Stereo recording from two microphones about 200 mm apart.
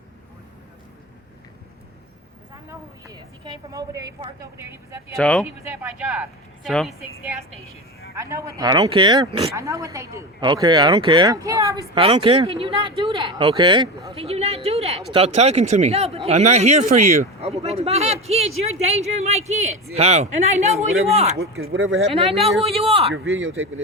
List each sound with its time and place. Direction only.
2.6 s speech: 20° right (ahead or behind)
5.1 s speech: centre (ahead or behind)
5.6 s speech: 10° right (ahead or behind)
6.7 s speech: centre (ahead or behind)
8.1 s speech: 15° right (ahead or behind)
11.9 s speech: 30° right (ahead or behind)
21.3 s speech: 50° right (ahead or behind)
21.6 s speech: 85° right
22.1 s speech: 30° right (ahead or behind)